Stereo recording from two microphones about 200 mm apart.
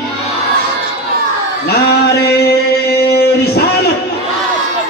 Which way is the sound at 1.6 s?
55° left (ahead or behind).